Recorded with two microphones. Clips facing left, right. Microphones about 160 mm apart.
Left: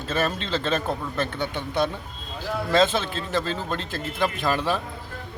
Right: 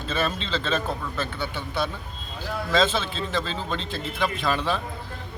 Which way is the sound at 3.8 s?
50° left (ahead or behind).